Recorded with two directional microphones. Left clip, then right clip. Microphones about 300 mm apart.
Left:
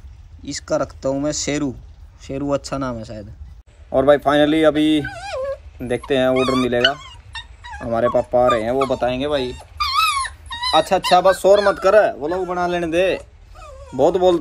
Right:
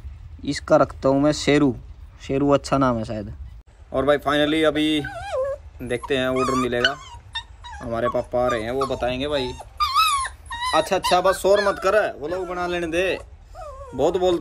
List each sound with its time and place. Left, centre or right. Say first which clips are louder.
0.4 s speech: right 4 dB; centre
5.0 s dog: even; right
5.8 s speech: left 5 dB; centre
10.1 s dog: left 1 dB; right
10.7 s speech: left 5 dB; centre